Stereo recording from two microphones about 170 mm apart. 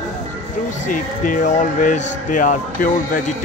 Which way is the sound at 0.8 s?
50° left (ahead or behind).